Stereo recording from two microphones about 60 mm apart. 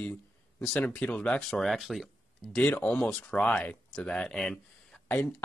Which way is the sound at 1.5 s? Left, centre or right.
Centre.